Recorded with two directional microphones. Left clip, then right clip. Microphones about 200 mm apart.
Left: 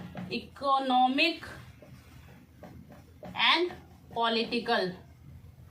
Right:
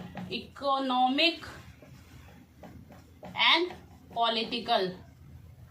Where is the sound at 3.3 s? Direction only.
20° left (ahead or behind).